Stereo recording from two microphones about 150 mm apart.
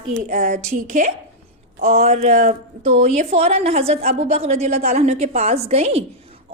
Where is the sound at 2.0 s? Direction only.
45° right (ahead or behind).